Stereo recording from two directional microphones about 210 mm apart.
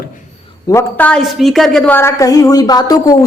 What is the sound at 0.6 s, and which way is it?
A woman's voice, 15° left (ahead or behind).